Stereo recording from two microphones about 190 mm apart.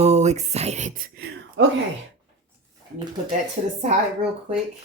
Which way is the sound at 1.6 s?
70° right (ahead or behind).